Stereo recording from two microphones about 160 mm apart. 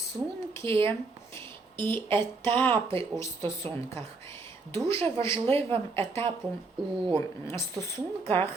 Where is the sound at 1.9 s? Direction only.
15° left (ahead or behind).